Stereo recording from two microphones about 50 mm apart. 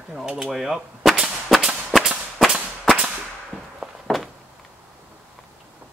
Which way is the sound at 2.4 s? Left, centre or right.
Centre.